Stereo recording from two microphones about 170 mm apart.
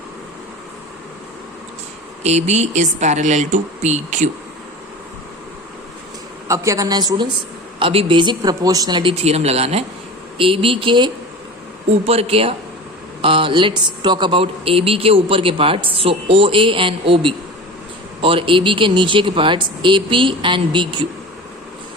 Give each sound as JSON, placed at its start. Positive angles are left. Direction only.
{"t": 2.2, "sound": "speech", "side_deg": -40}
{"t": 6.5, "sound": "speech", "side_deg": -20}